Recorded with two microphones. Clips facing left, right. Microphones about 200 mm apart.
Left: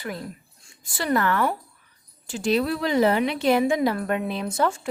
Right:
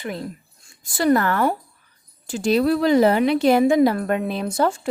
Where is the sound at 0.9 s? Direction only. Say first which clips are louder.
Right 5 dB; 40° right (ahead or behind).